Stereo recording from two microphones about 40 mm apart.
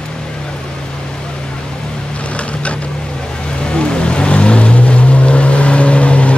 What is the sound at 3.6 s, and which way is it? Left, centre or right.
Vehicle, left.